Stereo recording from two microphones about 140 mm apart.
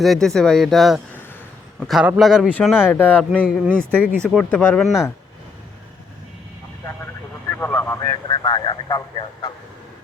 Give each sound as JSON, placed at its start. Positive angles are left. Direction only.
{"t": 0.0, "sound": "speech", "side_deg": 0}
{"t": 3.4, "sound": "speech", "side_deg": -10}
{"t": 4.3, "sound": "speech", "side_deg": 5}
{"t": 7.5, "sound": "vehicle", "side_deg": 15}
{"t": 8.1, "sound": "speech", "side_deg": 35}